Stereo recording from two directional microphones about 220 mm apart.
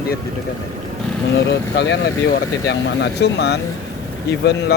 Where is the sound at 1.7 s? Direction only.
50° left (ahead or behind).